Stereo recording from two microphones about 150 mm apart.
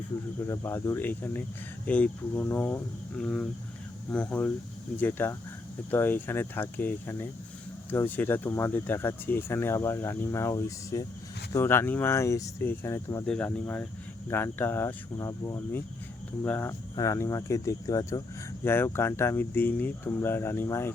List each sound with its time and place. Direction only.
0.4 s speech: 20° left (ahead or behind)
13.2 s speech: 5° left (ahead or behind)